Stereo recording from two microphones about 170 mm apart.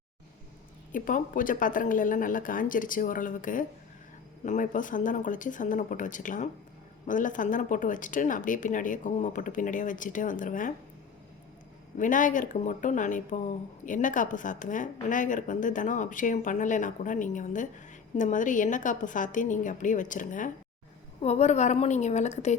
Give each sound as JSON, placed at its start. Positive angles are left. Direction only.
{"t": 0.9, "sound": "speech", "side_deg": 50}
{"t": 11.9, "sound": "speech", "side_deg": 50}
{"t": 21.2, "sound": "a woman's voice", "side_deg": 40}